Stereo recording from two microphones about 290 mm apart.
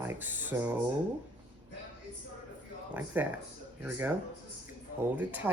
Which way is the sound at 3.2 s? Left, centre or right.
Centre.